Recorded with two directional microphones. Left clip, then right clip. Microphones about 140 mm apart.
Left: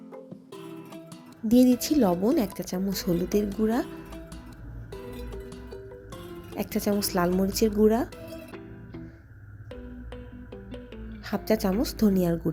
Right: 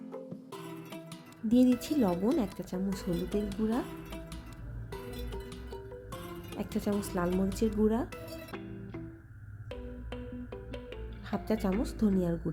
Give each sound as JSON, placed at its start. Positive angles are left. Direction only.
{"t": 1.5, "sound": "speech", "side_deg": 10}
{"t": 5.0, "sound": "music", "side_deg": -20}
{"t": 6.6, "sound": "speech", "side_deg": 15}
{"t": 11.3, "sound": "speech", "side_deg": 10}